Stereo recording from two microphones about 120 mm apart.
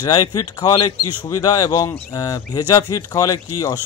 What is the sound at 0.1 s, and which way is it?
Speech, 30° left (ahead or behind).